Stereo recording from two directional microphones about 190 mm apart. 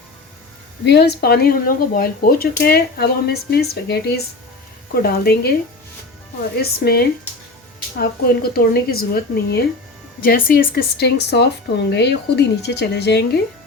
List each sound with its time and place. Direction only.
0.9 s speech: 60° left (ahead or behind)
6.6 s speech: 55° left (ahead or behind)